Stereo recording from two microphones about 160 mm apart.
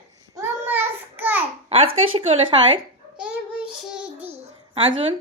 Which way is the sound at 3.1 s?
10° right (ahead or behind).